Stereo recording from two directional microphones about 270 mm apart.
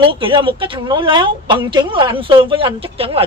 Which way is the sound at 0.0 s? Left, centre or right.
Centre.